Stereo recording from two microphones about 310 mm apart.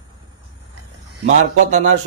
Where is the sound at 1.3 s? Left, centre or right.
Right.